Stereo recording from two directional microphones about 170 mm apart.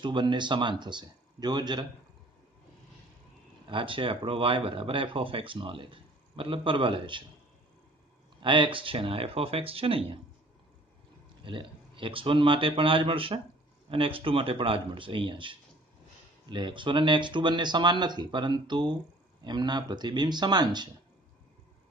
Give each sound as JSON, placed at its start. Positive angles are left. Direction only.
{"t": 0.0, "sound": "speech", "side_deg": -25}
{"t": 3.6, "sound": "speech", "side_deg": -30}
{"t": 8.4, "sound": "speech", "side_deg": -30}
{"t": 11.4, "sound": "speech", "side_deg": -30}